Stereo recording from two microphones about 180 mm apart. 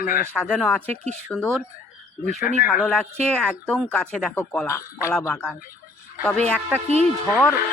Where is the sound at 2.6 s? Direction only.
10° right (ahead or behind).